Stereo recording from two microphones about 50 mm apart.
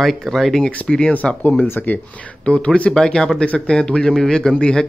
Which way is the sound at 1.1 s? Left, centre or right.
Left.